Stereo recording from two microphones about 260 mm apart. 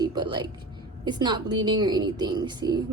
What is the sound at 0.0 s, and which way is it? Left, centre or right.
Speech, centre.